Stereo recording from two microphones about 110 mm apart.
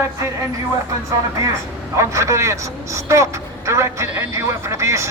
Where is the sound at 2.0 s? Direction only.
25° right (ahead or behind).